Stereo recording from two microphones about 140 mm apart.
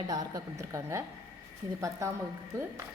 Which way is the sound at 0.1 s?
25° right (ahead or behind).